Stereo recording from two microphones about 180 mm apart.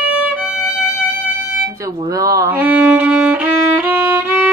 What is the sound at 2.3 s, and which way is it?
Music, 15° right (ahead or behind).